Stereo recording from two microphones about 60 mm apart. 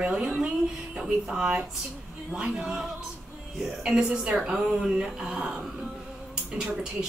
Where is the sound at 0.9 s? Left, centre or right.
Centre.